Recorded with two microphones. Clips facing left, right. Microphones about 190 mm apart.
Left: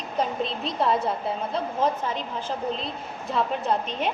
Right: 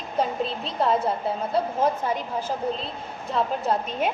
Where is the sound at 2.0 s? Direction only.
10° right (ahead or behind).